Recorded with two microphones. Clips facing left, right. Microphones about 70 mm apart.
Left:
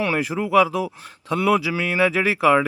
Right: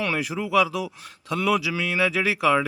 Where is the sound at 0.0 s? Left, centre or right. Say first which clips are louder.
Left 4 dB; left.